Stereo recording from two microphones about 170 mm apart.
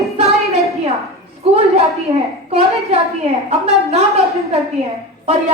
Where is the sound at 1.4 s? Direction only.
40° right (ahead or behind).